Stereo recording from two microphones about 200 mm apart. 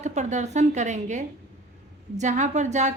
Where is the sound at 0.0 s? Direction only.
35° right (ahead or behind).